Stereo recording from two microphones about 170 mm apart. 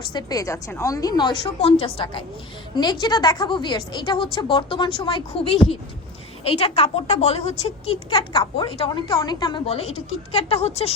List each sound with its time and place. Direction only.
0.1 s a woman's voice: 25° left (ahead or behind)
8.1 s a woman's voice: 20° left (ahead or behind)
9.6 s a woman's voice: 35° left (ahead or behind)